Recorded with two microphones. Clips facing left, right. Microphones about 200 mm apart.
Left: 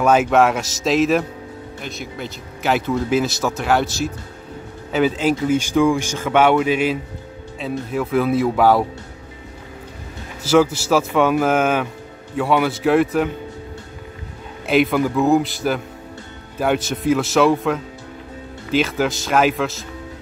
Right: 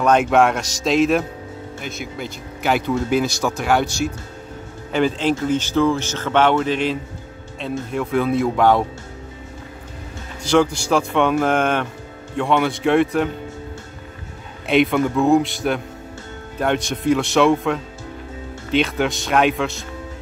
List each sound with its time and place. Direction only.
0.0 s speech: 5° left (ahead or behind)
10.4 s speech: 5° left (ahead or behind)
14.7 s speech: centre (ahead or behind)